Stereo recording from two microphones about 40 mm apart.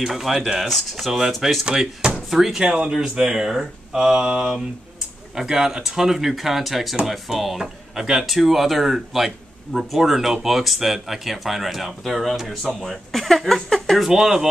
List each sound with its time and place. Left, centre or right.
0.0 s speech: centre
13.9 s speech: centre